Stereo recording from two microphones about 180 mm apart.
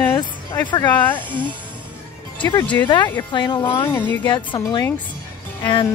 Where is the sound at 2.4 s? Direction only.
20° left (ahead or behind).